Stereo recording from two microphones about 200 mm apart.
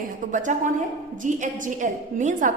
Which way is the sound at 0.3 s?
40° right (ahead or behind).